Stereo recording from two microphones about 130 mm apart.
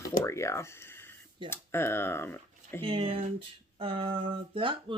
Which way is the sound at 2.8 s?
45° right (ahead or behind).